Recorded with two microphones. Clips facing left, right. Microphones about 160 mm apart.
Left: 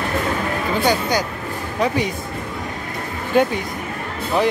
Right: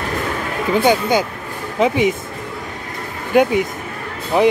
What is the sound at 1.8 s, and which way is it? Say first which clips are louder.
Speech: right 5 dB; 20° right (ahead or behind).